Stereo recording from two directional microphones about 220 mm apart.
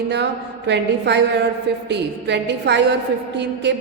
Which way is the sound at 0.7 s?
50° right (ahead or behind).